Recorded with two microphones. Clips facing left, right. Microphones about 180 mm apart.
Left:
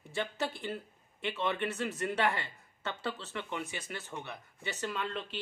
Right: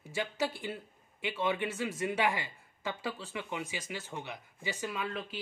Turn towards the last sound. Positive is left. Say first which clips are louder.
# even
turn(degrees=-5)  # may be behind; listen again after turning